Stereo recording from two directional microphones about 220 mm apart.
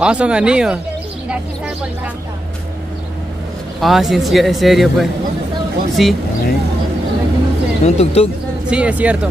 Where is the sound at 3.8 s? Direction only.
Centre (ahead or behind).